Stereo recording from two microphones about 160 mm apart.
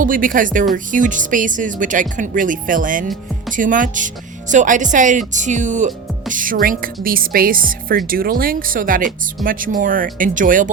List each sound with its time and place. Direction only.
0.0 s speech: 60° right (ahead or behind)